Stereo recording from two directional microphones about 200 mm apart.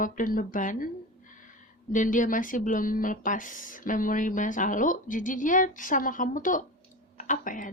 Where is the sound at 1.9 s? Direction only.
40° left (ahead or behind).